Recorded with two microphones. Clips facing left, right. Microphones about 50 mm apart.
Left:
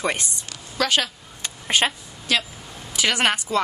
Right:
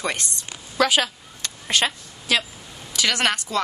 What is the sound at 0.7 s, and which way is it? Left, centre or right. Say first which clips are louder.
Speech: right 2 dB; centre.